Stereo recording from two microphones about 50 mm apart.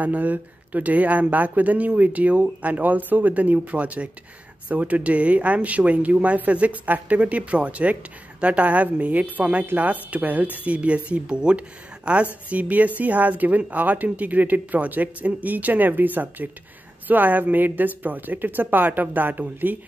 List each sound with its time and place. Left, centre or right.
0.0 s speech: right